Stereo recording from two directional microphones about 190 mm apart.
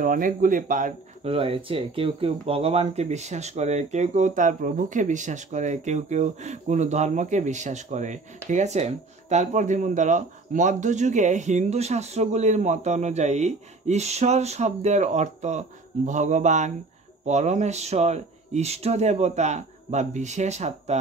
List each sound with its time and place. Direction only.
0.0 s speech: 45° right (ahead or behind)
1.2 s speech: 30° right (ahead or behind)